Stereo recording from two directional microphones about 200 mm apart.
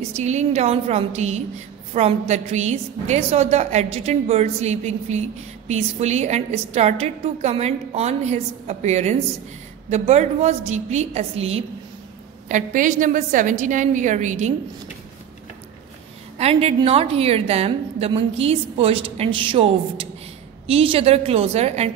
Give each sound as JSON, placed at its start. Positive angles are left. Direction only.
{"t": 0.1, "sound": "a woman's voice", "side_deg": -35}
{"t": 16.3, "sound": "a woman's voice", "side_deg": -30}